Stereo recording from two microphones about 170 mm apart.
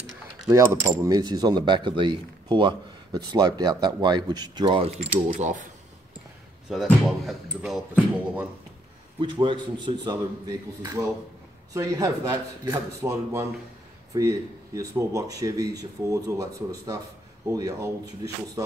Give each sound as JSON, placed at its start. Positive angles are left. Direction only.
{"t": 0.5, "sound": "speech", "side_deg": -20}
{"t": 6.7, "sound": "speech", "side_deg": 0}
{"t": 9.2, "sound": "speech", "side_deg": -30}
{"t": 11.7, "sound": "speech", "side_deg": -20}